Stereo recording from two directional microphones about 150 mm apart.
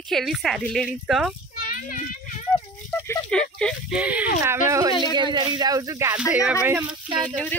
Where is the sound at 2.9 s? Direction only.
5° left (ahead or behind).